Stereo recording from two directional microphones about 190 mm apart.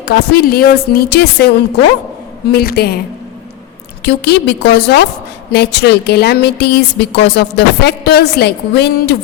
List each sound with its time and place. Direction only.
0.0 s a woman's voice: 55° left (ahead or behind)
4.0 s a woman's voice: 60° left (ahead or behind)